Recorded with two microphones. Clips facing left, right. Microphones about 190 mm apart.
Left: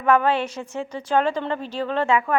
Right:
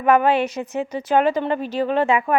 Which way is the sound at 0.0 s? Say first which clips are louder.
Right 3 dB; 15° right (ahead or behind).